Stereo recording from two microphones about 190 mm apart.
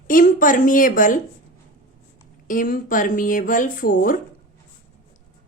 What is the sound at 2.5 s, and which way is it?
A woman's voice, 45° left (ahead or behind).